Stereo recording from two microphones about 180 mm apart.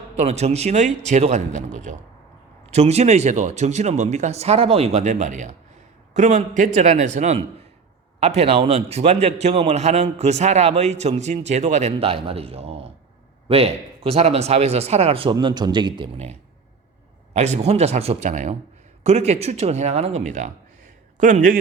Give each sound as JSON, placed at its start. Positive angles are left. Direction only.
{"t": 0.2, "sound": "a man's voice", "side_deg": -35}
{"t": 16.1, "sound": "a man's voice", "side_deg": -35}